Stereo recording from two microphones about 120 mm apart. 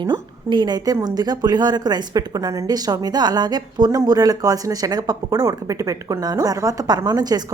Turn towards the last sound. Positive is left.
turn(degrees=-35)  # may be behind; listen again after turning